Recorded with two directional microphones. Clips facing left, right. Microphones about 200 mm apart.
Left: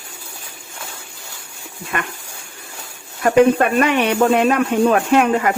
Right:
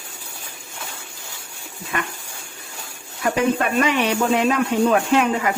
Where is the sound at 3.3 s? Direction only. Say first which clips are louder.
Left 7 dB; 60° left (ahead or behind).